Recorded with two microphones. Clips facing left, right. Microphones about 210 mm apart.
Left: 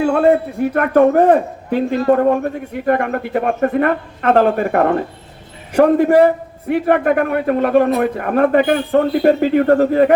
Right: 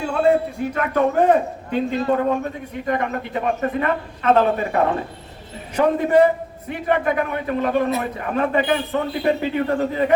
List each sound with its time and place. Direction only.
0.0 s a man's voice: 60° left (ahead or behind)